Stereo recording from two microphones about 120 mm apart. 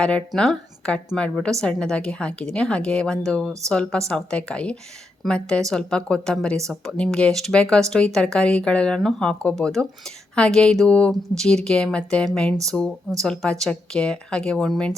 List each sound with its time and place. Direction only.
0.3 s a woman's voice: 5° left (ahead or behind)